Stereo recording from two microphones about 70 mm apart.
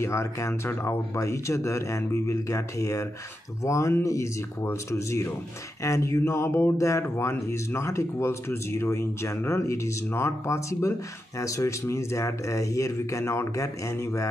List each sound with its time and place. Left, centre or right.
0.0 s speech: left